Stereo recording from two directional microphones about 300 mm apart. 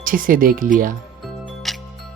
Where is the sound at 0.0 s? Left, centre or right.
Right.